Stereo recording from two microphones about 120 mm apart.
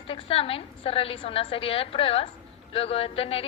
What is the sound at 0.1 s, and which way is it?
A woman's voice, 50° left (ahead or behind).